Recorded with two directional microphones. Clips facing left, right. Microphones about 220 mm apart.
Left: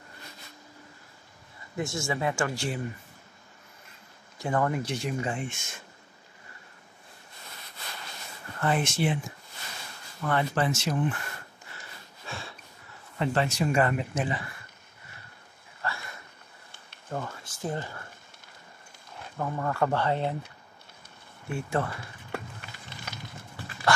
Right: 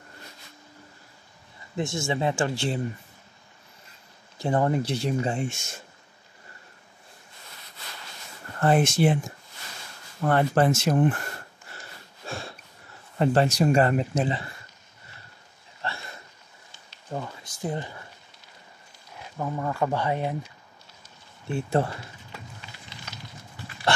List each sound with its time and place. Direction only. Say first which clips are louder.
1.8 s speech: right 3 dB; 25° right (ahead or behind)
4.4 s speech: right 4 dB; 30° right (ahead or behind)
8.5 s speech: right 6 dB; 40° right (ahead or behind)
10.2 s speech: right 6 dB; 45° right (ahead or behind)
12.3 s a sound: right 5 dB; 45° right (ahead or behind)
13.2 s speech: right 6 dB; 40° right (ahead or behind)
15.8 s a sound: right 1 dB; 25° right (ahead or behind)
17.1 s speech: right 1 dB; 15° right (ahead or behind)
19.3 s speech: right 1 dB; 10° right (ahead or behind)
21.5 s speech: right 4 dB; 30° right (ahead or behind)
22.3 s a sound: left 6 dB; 55° left (ahead or behind)